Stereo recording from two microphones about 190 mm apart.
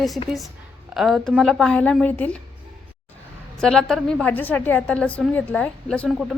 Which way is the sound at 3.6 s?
5° left (ahead or behind).